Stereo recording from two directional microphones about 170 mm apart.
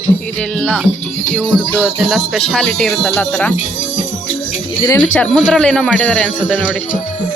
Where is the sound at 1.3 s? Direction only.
10° left (ahead or behind).